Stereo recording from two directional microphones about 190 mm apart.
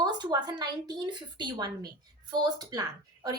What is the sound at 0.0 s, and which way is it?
A woman's voice, 25° right (ahead or behind).